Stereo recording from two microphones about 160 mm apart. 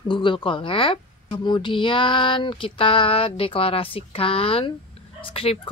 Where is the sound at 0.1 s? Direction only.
30° left (ahead or behind).